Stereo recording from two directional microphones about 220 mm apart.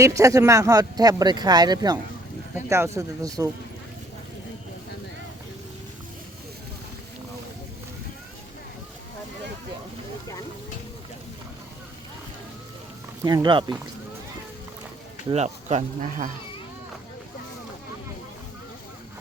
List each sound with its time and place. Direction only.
0.0 s speech: 15° right (ahead or behind)
13.2 s speech: 20° right (ahead or behind)
15.3 s speech: 30° right (ahead or behind)